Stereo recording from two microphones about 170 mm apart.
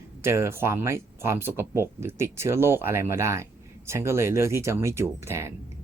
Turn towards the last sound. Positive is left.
turn(degrees=-15)  # may be behind; listen again after turning